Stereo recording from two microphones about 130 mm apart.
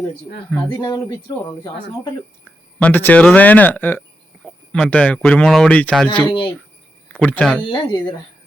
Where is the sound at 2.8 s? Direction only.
15° left (ahead or behind).